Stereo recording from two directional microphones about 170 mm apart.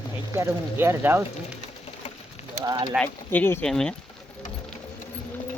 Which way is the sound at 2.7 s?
25° right (ahead or behind).